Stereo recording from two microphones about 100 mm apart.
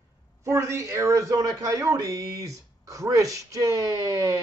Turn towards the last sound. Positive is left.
turn(degrees=-30)  # may be behind; listen again after turning